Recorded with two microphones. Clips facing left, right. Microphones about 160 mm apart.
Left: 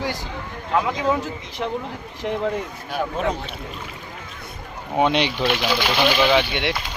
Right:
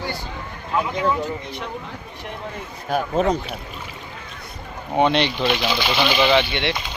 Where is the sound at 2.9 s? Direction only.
40° right (ahead or behind).